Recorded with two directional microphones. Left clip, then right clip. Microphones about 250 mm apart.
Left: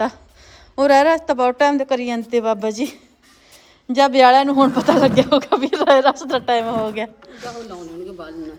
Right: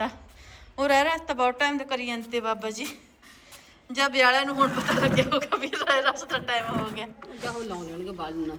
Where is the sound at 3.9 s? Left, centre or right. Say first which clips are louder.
Left 10 dB; centre.